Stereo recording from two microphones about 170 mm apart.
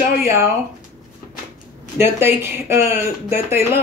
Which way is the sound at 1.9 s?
15° right (ahead or behind).